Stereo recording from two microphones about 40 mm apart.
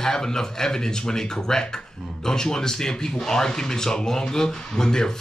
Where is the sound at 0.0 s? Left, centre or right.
Centre.